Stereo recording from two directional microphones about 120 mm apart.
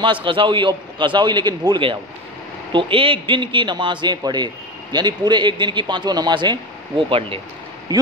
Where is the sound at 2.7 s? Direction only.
50° right (ahead or behind).